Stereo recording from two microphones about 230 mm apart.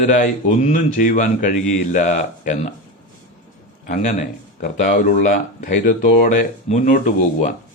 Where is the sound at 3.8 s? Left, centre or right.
Left.